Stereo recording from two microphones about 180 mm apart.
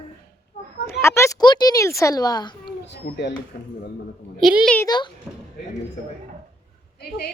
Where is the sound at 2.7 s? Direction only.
65° left (ahead or behind).